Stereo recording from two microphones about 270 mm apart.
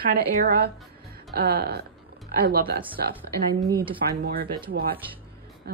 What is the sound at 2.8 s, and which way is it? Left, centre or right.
Speech, centre.